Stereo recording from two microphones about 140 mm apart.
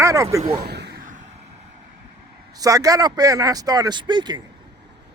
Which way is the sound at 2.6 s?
25° right (ahead or behind).